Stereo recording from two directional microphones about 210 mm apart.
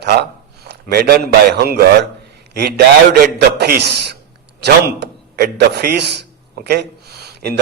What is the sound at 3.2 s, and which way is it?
A man's voice, 50° right (ahead or behind).